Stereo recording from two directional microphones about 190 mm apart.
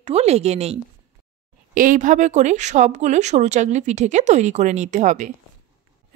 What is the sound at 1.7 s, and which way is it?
A woman's voice, 45° right (ahead or behind).